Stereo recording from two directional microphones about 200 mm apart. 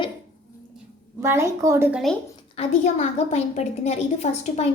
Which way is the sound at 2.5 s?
35° left (ahead or behind).